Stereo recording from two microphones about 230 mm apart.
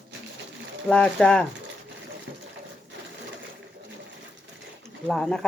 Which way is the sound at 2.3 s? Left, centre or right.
Right.